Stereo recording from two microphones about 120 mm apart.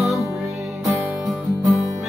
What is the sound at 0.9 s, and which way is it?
Music, 30° right (ahead or behind).